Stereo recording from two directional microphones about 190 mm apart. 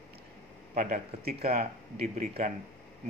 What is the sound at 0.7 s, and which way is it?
Speech, 50° right (ahead or behind).